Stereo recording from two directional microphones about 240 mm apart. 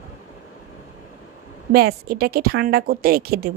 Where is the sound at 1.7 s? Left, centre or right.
Right.